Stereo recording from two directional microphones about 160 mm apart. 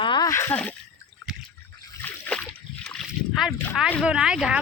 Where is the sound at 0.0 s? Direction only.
30° left (ahead or behind).